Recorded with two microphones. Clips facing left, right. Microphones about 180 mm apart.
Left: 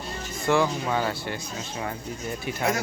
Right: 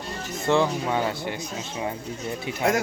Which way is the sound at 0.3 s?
20° right (ahead or behind).